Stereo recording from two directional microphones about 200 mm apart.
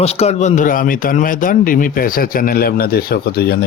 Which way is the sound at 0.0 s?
30° left (ahead or behind).